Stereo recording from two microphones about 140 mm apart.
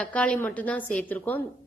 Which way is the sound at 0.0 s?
10° left (ahead or behind).